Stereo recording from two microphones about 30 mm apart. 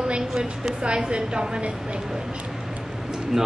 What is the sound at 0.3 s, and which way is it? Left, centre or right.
Speech, right.